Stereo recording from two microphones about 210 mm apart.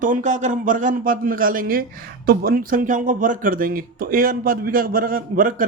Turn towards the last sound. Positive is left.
turn(degrees=-40)  # may be behind; listen again after turning